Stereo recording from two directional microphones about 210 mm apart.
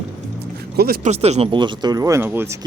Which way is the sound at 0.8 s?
45° right (ahead or behind).